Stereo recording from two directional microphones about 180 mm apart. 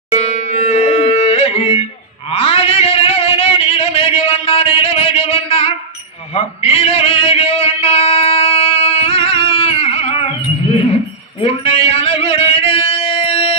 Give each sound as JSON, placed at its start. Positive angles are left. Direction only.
{"t": 0.1, "sound": "a sound", "side_deg": 35}
{"t": 11.4, "sound": "speech", "side_deg": 30}
{"t": 12.9, "sound": "music", "side_deg": 30}